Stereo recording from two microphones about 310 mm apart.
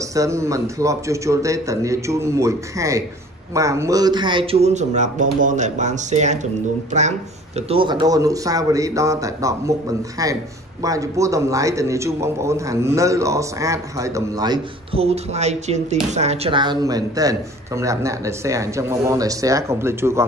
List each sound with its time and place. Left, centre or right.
0.1 s a man's voice: centre